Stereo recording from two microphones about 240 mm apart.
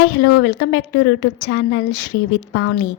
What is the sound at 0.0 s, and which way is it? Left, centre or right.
A woman's voice, left.